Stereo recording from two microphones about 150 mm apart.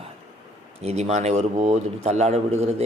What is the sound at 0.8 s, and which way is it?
A man's voice, 45° right (ahead or behind).